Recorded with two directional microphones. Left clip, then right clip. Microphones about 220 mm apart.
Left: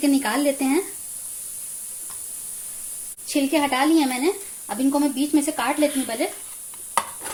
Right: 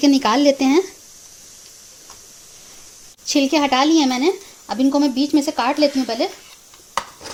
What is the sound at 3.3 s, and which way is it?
Speech, 40° right (ahead or behind).